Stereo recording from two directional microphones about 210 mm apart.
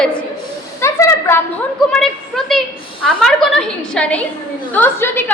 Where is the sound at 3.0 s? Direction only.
5° left (ahead or behind).